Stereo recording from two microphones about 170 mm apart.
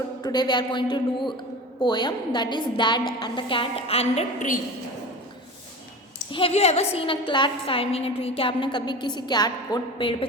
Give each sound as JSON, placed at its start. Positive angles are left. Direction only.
{"t": 0.2, "sound": "a woman's voice", "side_deg": 25}
{"t": 6.3, "sound": "a woman's voice", "side_deg": 35}